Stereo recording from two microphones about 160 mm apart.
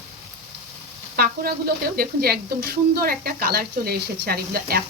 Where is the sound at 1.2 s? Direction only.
70° right (ahead or behind).